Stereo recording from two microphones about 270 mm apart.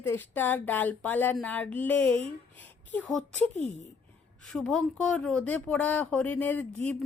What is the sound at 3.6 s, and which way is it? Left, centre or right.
Speech, left.